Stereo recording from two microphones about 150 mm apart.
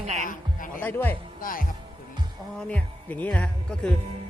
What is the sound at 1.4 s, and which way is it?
Speech, 70° left (ahead or behind).